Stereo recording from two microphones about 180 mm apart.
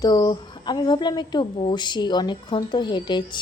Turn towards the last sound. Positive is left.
turn(degrees=25)  # may be behind; listen again after turning